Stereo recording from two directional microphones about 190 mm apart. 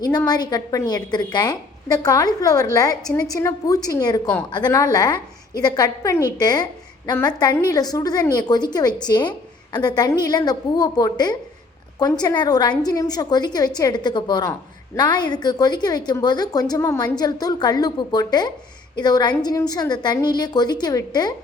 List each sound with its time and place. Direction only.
0.0 s a woman's voice: 20° left (ahead or behind)